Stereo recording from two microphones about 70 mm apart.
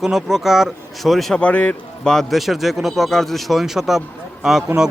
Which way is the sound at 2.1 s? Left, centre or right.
Centre.